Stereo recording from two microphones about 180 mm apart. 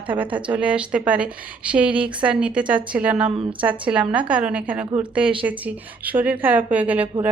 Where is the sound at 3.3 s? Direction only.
30° right (ahead or behind).